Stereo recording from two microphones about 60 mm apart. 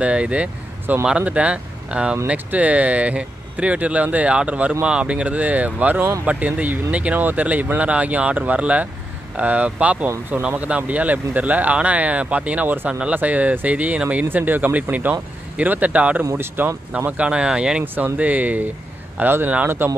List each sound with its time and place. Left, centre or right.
0.0 s speech: centre
16.3 s speech: right
16.9 s speech: right
17.9 s speech: right